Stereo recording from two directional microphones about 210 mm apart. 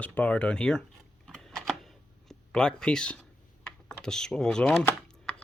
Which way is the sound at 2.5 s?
5° left (ahead or behind).